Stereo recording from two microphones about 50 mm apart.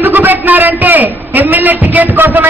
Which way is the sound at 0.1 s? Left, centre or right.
Right.